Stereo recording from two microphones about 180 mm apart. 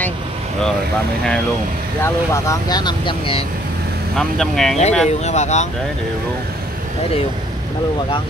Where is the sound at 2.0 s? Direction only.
15° left (ahead or behind).